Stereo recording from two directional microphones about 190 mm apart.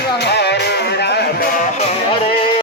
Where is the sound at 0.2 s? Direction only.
60° left (ahead or behind).